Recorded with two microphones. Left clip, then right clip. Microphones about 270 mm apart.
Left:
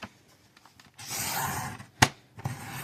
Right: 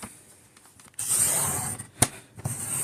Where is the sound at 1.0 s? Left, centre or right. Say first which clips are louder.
Right 3 dB; centre.